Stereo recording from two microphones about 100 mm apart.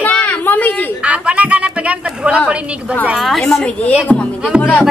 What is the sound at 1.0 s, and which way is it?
A woman's voice, 15° right (ahead or behind).